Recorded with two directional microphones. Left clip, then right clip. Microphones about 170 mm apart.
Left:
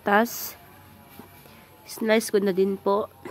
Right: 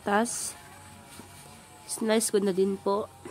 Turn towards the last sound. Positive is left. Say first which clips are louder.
# left 4 dB
turn(degrees=10)  # may be behind; listen again after turning